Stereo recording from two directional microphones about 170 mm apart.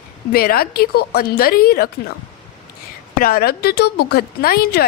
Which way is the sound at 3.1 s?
60° left (ahead or behind).